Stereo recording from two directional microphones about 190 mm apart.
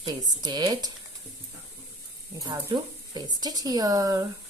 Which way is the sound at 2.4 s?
25° right (ahead or behind).